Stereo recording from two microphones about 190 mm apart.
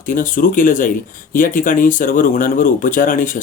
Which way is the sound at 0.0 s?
45° left (ahead or behind).